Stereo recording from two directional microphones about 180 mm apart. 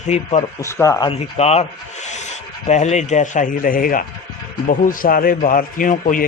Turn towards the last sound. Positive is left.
turn(degrees=50)  # may be behind; listen again after turning